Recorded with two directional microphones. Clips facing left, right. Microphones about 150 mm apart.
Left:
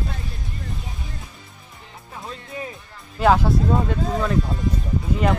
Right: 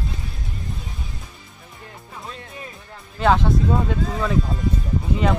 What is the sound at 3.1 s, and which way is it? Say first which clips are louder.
Speech: left 1 dB; 5° left (ahead or behind).